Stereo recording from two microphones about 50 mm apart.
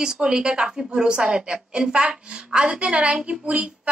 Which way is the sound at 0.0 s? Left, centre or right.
Centre.